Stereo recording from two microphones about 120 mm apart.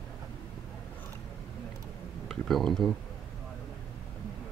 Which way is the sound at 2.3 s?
Centre (ahead or behind).